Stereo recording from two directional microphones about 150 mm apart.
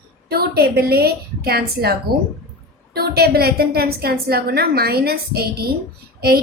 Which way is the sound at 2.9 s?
90° right.